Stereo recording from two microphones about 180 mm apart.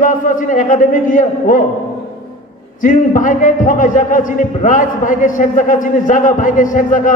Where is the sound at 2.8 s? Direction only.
45° left (ahead or behind).